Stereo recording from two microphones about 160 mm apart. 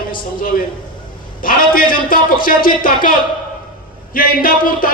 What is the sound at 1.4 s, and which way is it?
A man's voice, 60° left (ahead or behind).